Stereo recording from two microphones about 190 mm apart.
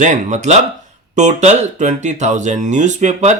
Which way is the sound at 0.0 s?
40° right (ahead or behind).